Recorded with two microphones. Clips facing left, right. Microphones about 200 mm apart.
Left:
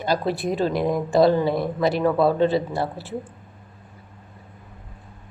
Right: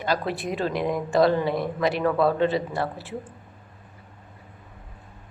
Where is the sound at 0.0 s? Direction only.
35° left (ahead or behind).